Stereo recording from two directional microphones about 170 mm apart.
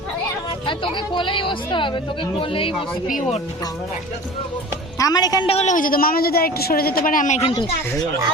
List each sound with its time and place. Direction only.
0.7 s a woman's voice: 30° left (ahead or behind)
3.1 s speech: 45° left (ahead or behind)
4.9 s a woman's voice: 20° left (ahead or behind)
5.5 s a woman's voice: 40° left (ahead or behind)